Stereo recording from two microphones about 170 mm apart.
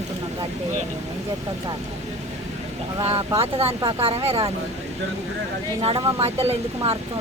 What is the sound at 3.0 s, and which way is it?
Speech, 30° right (ahead or behind).